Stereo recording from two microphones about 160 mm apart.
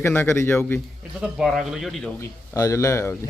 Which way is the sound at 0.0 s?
15° left (ahead or behind).